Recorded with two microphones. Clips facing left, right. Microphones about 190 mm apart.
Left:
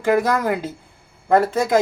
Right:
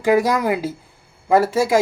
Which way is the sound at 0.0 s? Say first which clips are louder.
Right 2 dB; 10° right (ahead or behind).